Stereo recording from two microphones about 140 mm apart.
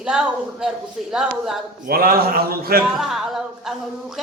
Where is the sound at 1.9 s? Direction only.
90° right.